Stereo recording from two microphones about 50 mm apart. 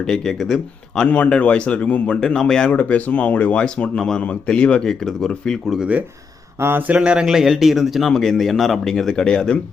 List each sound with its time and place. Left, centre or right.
0.1 s speech: centre
1.0 s speech: left
2.7 s speech: left
3.6 s speech: centre
4.2 s speech: left
4.8 s speech: centre
6.6 s speech: right
6.8 s speech: right
7.3 s speech: centre
8.0 s speech: centre